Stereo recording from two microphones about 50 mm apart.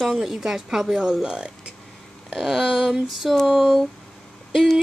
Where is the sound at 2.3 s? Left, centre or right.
Centre.